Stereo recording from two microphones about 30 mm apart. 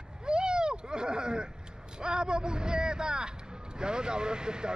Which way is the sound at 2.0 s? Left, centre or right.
Right.